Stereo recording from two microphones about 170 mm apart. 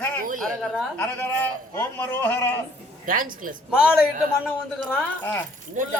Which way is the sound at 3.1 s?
50° right (ahead or behind).